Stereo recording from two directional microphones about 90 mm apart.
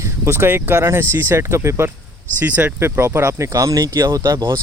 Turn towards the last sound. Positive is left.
turn(degrees=-35)  # may be behind; listen again after turning